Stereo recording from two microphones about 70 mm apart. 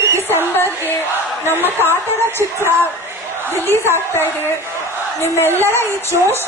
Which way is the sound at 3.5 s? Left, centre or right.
Left.